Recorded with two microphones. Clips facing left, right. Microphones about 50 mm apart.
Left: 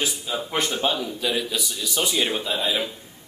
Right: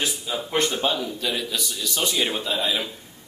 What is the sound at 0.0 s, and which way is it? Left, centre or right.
A man's voice, centre.